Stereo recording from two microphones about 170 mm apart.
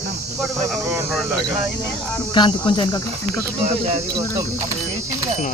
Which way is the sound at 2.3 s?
30° left (ahead or behind).